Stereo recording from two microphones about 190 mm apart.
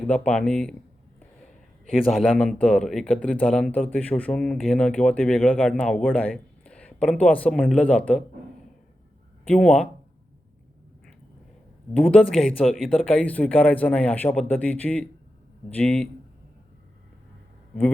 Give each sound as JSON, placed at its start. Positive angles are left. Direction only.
{"t": 0.1, "sound": "a man's voice", "side_deg": 5}
{"t": 1.9, "sound": "a man's voice", "side_deg": 0}
{"t": 9.5, "sound": "a man's voice", "side_deg": 5}
{"t": 11.9, "sound": "a man's voice", "side_deg": 5}